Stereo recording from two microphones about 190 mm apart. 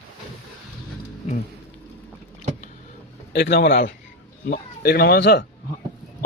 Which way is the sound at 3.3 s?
60° left (ahead or behind).